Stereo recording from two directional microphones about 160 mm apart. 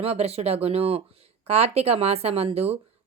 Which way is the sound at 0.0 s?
40° right (ahead or behind).